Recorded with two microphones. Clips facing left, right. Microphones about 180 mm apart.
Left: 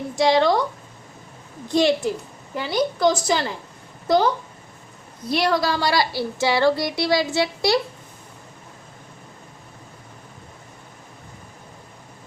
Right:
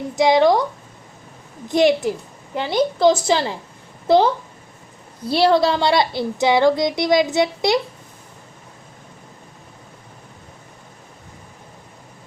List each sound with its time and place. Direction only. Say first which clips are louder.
0.2 s speech: right 3 dB; 15° right (ahead or behind)
1.6 s a woman's voice: right 3 dB; 15° right (ahead or behind)